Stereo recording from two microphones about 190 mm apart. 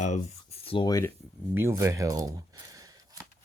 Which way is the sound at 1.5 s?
15° right (ahead or behind).